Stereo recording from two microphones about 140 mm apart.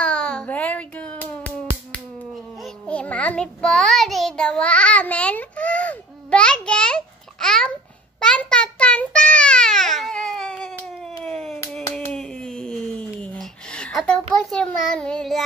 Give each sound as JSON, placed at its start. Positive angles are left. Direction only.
{"t": 0.0, "sound": "music", "side_deg": 5}
{"t": 2.6, "sound": "child singing", "side_deg": 10}
{"t": 11.9, "sound": "a sound", "side_deg": 5}
{"t": 14.3, "sound": "a child's voice", "side_deg": 5}